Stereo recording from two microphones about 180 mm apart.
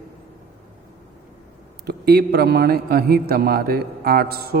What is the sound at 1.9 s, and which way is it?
A man's voice, 65° right (ahead or behind).